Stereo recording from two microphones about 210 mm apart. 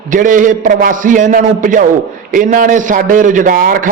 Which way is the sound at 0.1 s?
40° right (ahead or behind).